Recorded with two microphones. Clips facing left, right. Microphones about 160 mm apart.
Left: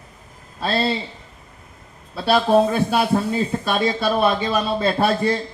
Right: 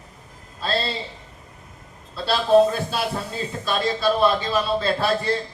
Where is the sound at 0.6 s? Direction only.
60° left (ahead or behind).